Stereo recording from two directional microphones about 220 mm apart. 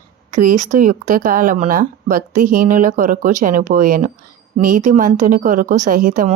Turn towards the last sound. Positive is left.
turn(degrees=-35)  # may be behind; listen again after turning